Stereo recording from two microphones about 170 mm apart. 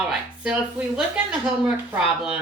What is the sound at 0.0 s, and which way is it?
A woman's voice, 5° right (ahead or behind).